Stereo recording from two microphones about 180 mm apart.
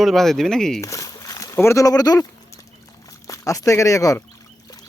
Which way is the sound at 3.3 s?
20° left (ahead or behind).